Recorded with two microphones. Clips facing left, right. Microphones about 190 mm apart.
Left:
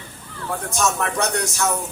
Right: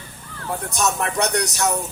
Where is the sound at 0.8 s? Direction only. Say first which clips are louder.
Even; 15° right (ahead or behind).